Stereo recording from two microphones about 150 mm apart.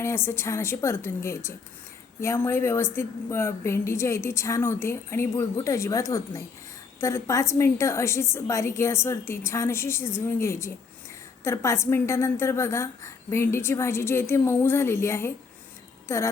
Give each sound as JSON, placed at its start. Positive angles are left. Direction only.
{"t": 0.0, "sound": "a woman's voice", "side_deg": 15}